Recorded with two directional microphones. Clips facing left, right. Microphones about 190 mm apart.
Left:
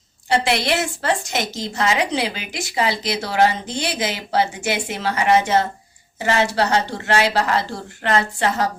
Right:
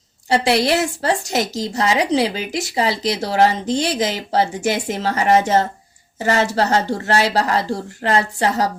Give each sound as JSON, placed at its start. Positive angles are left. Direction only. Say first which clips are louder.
{"t": 0.3, "sound": "a woman's voice", "louder": "right 3 dB", "side_deg": -35}